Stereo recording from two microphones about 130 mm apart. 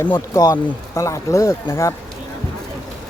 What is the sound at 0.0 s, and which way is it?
Speech, 30° left (ahead or behind).